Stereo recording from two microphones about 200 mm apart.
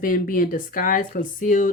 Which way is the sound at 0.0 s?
45° left (ahead or behind).